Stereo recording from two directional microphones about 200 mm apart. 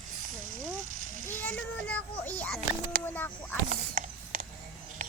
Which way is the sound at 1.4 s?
5° left (ahead or behind).